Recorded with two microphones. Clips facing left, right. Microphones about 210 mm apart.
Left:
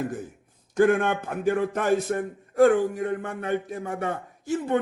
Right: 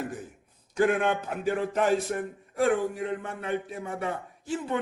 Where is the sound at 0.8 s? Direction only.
50° left (ahead or behind).